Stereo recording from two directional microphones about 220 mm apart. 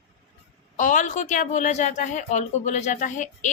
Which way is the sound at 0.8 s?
35° left (ahead or behind).